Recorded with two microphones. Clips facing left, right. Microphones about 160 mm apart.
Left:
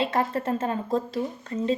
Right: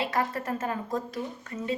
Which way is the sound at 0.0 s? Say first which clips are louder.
Left 4 dB; 25° left (ahead or behind).